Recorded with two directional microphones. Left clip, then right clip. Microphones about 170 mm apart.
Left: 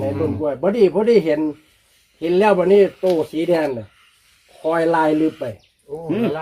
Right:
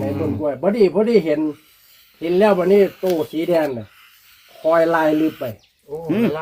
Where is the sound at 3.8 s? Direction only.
25° right (ahead or behind).